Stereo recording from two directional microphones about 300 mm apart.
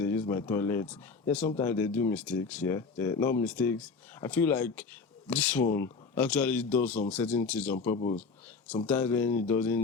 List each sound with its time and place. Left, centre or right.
0.0 s speech: centre
7.9 s speech: left
8.9 s speech: centre